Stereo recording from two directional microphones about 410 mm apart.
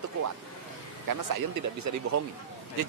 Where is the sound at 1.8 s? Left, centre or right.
Right.